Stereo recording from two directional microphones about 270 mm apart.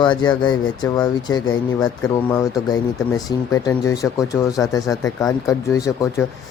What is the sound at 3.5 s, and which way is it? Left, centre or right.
Speech, centre.